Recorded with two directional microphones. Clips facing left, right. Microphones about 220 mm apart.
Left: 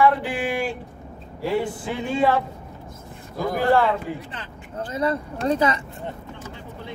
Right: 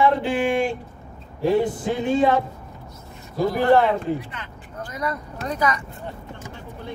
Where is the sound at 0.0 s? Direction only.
25° right (ahead or behind).